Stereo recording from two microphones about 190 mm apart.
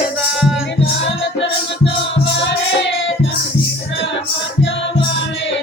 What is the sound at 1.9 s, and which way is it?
Music, 70° left (ahead or behind).